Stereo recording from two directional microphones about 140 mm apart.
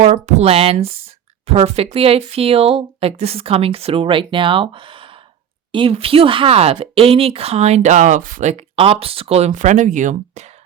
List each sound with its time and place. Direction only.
0.0 s speech: 50° right (ahead or behind)